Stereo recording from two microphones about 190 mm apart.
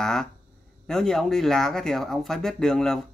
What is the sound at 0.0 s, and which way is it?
Speech, 5° left (ahead or behind).